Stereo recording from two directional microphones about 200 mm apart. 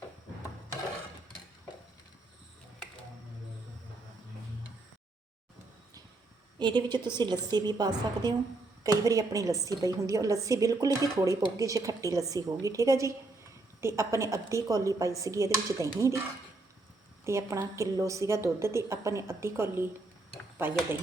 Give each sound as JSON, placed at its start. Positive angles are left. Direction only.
{"t": 6.6, "sound": "a woman's voice", "side_deg": -20}
{"t": 17.2, "sound": "a woman's voice", "side_deg": -15}